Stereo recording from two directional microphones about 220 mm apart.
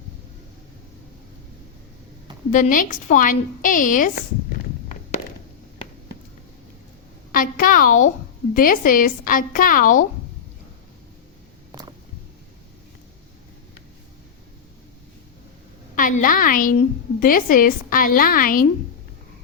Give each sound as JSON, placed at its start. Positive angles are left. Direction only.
{"t": 2.5, "sound": "a woman's voice", "side_deg": 35}
{"t": 7.3, "sound": "a woman's voice", "side_deg": 40}
{"t": 16.0, "sound": "a woman's voice", "side_deg": 40}